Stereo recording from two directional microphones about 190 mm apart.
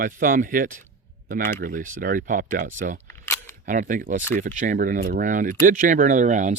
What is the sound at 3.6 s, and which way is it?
Speech, 45° right (ahead or behind).